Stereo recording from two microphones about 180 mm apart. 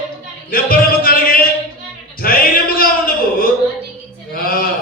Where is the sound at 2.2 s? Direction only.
55° left (ahead or behind).